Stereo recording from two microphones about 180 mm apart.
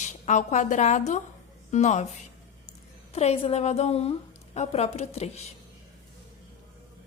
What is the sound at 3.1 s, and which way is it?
A woman's voice, 35° left (ahead or behind).